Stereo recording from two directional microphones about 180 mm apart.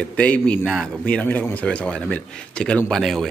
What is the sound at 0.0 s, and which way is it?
A man's voice, 5° left (ahead or behind).